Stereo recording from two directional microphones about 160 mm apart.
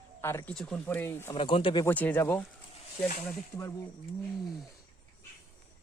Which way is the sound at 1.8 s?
10° left (ahead or behind).